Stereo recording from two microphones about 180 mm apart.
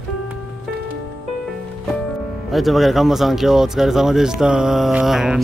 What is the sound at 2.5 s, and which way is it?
Speech, centre (ahead or behind).